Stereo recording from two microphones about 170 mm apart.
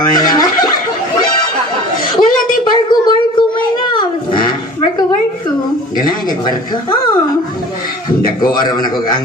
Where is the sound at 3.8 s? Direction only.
30° left (ahead or behind).